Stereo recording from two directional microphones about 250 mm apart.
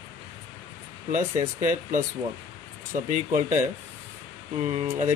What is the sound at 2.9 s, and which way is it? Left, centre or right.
Speech, right.